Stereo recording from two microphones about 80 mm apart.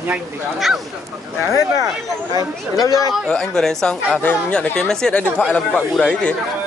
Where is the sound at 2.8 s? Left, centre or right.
Left.